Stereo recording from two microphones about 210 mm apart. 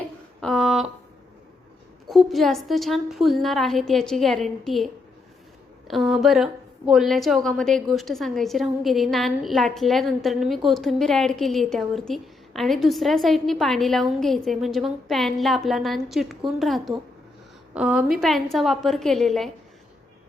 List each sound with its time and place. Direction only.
0.4 s a sound: centre (ahead or behind)
2.0 s a woman's voice: centre (ahead or behind)
5.9 s a woman's voice: centre (ahead or behind)